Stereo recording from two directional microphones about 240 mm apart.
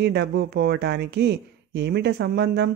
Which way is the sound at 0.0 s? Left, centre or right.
Right.